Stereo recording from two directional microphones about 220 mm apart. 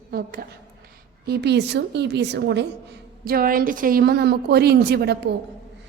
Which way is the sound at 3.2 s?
40° right (ahead or behind).